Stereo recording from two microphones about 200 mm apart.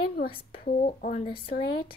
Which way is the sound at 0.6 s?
45° left (ahead or behind).